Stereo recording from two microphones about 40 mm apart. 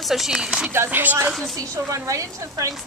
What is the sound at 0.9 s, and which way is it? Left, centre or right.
Speech, right.